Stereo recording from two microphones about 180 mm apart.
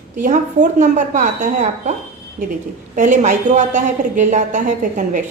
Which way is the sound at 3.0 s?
45° right (ahead or behind).